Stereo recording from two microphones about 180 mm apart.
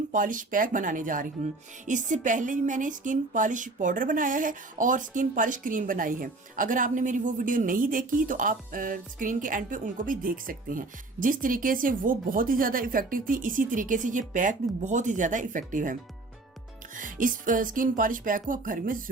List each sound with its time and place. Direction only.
0.1 s speech: 45° right (ahead or behind)